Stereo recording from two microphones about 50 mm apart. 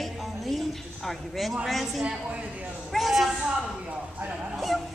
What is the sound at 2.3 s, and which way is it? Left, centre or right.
Speech, right.